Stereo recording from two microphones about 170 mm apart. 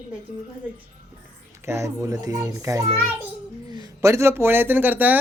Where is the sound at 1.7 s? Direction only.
15° right (ahead or behind).